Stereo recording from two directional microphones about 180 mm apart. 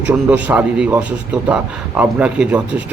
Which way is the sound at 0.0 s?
10° right (ahead or behind).